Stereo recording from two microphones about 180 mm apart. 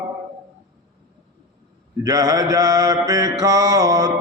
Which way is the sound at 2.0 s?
20° right (ahead or behind).